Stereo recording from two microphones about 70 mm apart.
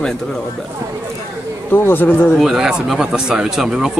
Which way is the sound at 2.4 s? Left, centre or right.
Centre.